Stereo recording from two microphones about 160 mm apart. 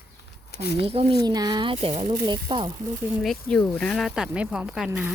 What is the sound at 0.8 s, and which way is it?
Speech, 35° right (ahead or behind).